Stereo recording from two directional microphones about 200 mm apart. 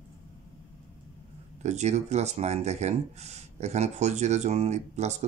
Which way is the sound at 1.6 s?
35° right (ahead or behind).